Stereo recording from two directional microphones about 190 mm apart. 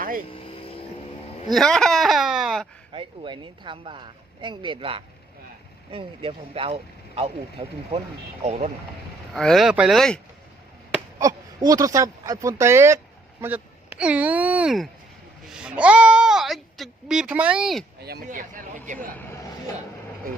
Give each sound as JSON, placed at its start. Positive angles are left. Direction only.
{"t": 0.3, "sound": "vehicle", "side_deg": 30}
{"t": 1.5, "sound": "speech", "side_deg": 5}
{"t": 2.9, "sound": "speech", "side_deg": -25}
{"t": 9.3, "sound": "speech", "side_deg": 0}
{"t": 11.2, "sound": "speech", "side_deg": -20}
{"t": 18.0, "sound": "speech", "side_deg": -50}
{"t": 19.1, "sound": "speech", "side_deg": 10}